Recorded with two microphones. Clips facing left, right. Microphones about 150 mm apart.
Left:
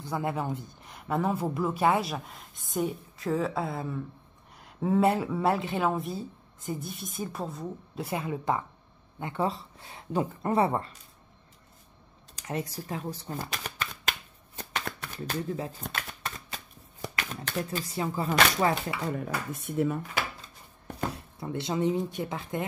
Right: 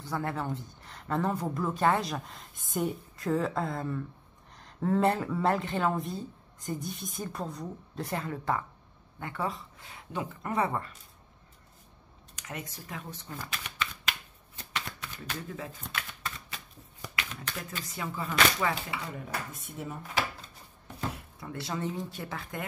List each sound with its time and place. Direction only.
0.0 s speech: 15° left (ahead or behind); by 10.9 s 30° left (ahead or behind)
12.4 s speech: 35° left (ahead or behind)
14.6 s shuffling cards: 50° left (ahead or behind)
15.1 s speech: 30° left (ahead or behind)
15.9 s shuffling cards: 40° left (ahead or behind)
21.1 s speech: 25° left (ahead or behind)